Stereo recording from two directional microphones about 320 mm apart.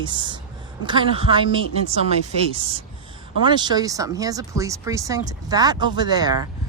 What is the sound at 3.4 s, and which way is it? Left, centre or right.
Speech, centre.